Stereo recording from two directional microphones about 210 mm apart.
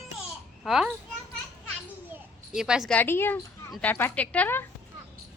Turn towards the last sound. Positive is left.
turn(degrees=10)  # may be behind; listen again after turning